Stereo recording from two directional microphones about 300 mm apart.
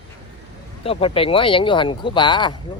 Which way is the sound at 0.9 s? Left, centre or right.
Centre.